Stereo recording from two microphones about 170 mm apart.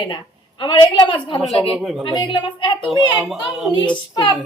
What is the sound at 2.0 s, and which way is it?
Speech, 30° left (ahead or behind).